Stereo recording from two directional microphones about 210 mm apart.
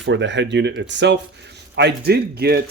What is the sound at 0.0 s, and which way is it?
Speech, 60° right (ahead or behind).